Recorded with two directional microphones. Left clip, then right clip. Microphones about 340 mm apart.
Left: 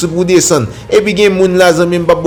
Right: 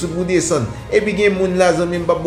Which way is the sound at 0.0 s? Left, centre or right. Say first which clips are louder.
Left 8 dB; left.